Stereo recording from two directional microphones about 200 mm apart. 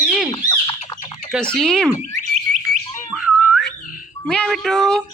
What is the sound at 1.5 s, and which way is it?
Speech, 5° left (ahead or behind).